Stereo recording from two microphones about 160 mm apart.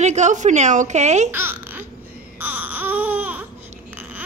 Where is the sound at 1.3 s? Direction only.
15° right (ahead or behind).